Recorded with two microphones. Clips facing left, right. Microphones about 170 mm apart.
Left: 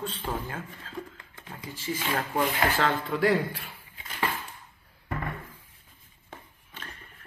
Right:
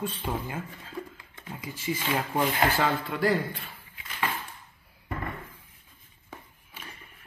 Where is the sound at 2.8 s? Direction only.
Centre (ahead or behind).